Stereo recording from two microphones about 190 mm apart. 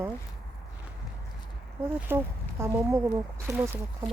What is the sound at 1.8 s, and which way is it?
Speech, 10° right (ahead or behind).